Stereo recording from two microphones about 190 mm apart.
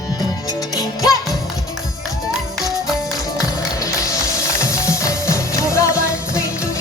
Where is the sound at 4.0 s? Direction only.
15° left (ahead or behind).